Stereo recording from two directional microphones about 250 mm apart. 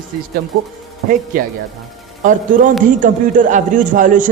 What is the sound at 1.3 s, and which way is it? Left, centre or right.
A woman's voice, right.